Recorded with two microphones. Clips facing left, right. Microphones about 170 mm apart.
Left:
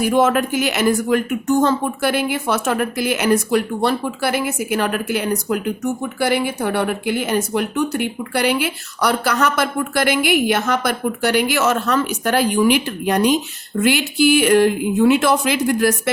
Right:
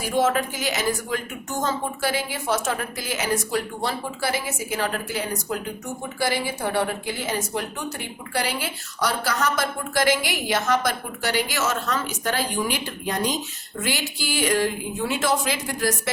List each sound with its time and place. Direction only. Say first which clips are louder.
0.0 s speech: left 6 dB; 60° left (ahead or behind)